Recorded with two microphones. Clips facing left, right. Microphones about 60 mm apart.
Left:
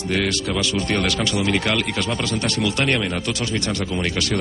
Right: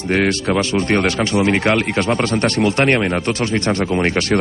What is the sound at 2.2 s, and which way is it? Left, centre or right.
Speech, right.